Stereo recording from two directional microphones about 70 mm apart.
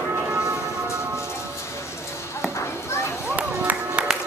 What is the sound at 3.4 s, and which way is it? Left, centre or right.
Music, right.